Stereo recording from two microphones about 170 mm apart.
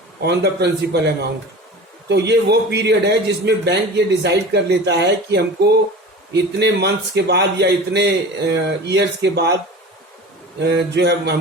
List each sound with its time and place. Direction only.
0.2 s a man's voice: 80° right
10.6 s a man's voice: 80° right